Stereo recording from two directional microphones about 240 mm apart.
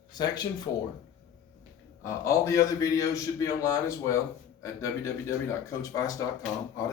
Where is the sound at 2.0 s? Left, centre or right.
Centre.